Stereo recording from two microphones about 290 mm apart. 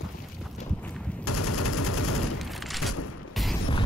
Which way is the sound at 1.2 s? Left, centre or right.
Left.